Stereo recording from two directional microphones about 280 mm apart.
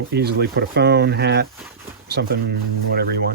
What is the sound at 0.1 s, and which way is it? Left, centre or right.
Speech, right.